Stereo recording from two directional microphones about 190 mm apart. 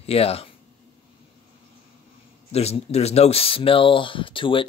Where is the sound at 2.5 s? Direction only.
35° left (ahead or behind).